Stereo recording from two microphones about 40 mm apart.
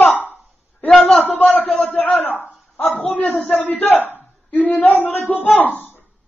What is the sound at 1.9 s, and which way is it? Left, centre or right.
Speech, left.